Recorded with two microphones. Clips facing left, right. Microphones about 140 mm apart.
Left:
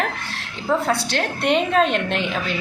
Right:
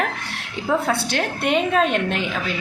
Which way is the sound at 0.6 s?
5° right (ahead or behind).